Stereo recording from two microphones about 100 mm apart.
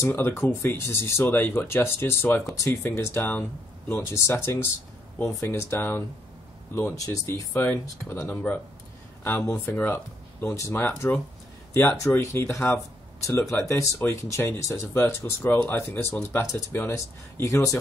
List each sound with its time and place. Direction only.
0.0 s speech: 25° left (ahead or behind)
3.2 s speech: 15° left (ahead or behind)
7.0 s speech: 30° left (ahead or behind)
9.4 s speech: 20° left (ahead or behind)